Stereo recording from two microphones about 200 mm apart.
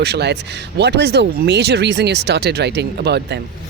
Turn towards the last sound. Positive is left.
turn(degrees=-55)  # may be behind; listen again after turning